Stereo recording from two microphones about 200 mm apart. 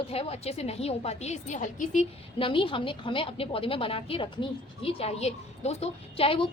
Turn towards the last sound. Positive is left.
turn(degrees=30)  # may be behind; listen again after turning